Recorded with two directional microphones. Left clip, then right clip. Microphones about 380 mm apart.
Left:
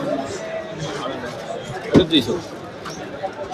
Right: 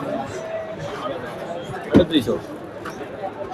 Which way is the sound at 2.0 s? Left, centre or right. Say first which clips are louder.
Left 1 dB; centre.